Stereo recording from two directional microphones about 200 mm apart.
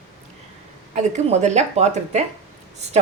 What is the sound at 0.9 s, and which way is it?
A woman's voice, 35° right (ahead or behind).